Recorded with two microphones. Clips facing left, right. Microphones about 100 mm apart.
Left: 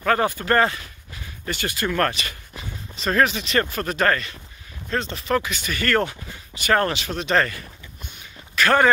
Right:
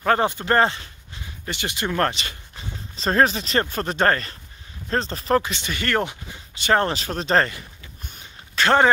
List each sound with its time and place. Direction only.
0.0 s speech: 25° right (ahead or behind)
6.9 s speech: 35° right (ahead or behind)
8.1 s a sound: 30° right (ahead or behind)